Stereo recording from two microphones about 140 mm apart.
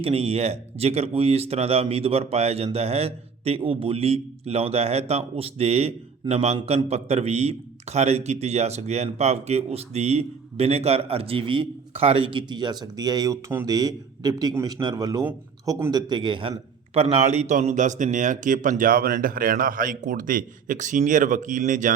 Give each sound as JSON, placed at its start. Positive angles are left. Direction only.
{"t": 0.0, "sound": "a man's voice", "side_deg": -45}